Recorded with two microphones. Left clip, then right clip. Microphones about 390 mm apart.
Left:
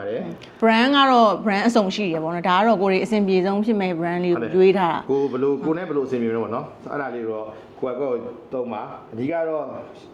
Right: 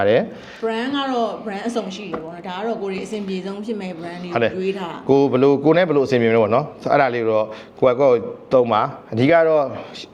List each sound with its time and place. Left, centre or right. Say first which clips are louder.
0.6 s speech: left 6 dB; left
5.0 s a man's voice: right 6 dB; right
8.5 s a man's voice: right 13 dB; right